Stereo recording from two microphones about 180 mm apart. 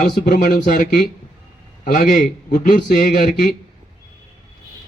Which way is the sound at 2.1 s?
50° left (ahead or behind).